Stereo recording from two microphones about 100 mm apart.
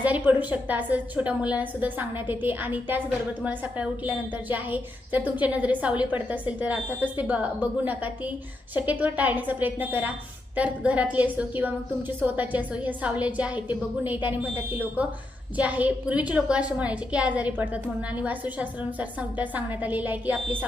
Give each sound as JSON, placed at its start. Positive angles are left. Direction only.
{"t": 0.0, "sound": "a woman's voice", "side_deg": -15}